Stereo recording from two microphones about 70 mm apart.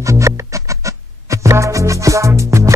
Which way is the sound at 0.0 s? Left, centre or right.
Right.